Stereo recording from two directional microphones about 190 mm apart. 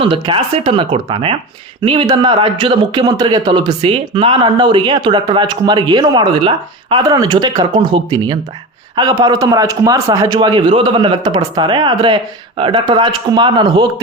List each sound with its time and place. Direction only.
0.0 s speech: 25° right (ahead or behind)